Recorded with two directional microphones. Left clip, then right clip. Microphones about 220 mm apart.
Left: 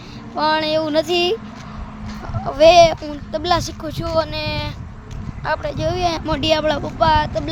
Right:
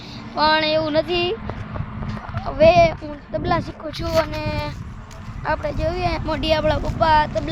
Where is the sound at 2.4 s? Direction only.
20° left (ahead or behind).